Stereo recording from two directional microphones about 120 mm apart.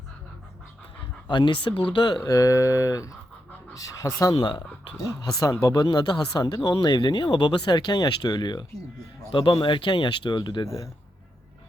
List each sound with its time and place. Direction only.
1.3 s speech: 40° left (ahead or behind)
2.2 s speech: 30° left (ahead or behind)
4.4 s speech: 40° left (ahead or behind)